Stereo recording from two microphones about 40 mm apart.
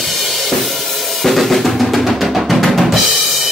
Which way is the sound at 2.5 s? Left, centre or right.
Centre.